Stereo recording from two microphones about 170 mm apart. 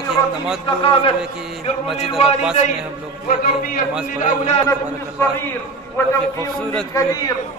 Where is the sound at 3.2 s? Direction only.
55° left (ahead or behind).